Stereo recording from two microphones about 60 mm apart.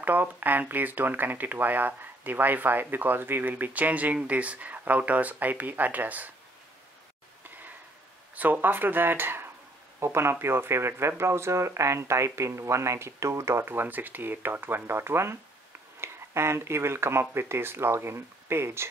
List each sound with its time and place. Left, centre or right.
0.0 s speech: right
7.4 s a sound: right
8.4 s speech: right
9.9 s speech: right